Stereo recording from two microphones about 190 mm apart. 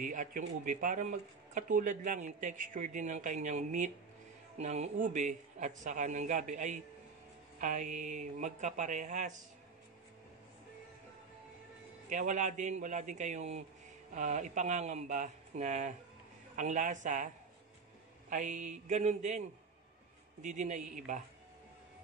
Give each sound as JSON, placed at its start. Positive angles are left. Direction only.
{"t": 0.0, "sound": "speech", "side_deg": -45}
{"t": 12.1, "sound": "speech", "side_deg": -40}
{"t": 18.3, "sound": "speech", "side_deg": -40}
{"t": 20.4, "sound": "speech", "side_deg": -40}